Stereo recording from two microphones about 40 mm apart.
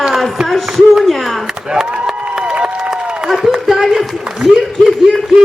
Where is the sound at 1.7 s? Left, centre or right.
Centre.